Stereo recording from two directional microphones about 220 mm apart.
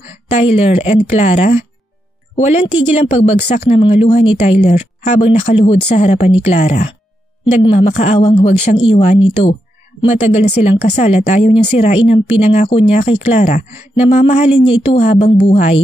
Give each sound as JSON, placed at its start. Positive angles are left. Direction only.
{"t": 0.4, "sound": "a woman's voice", "side_deg": 25}
{"t": 10.6, "sound": "a woman's voice", "side_deg": 30}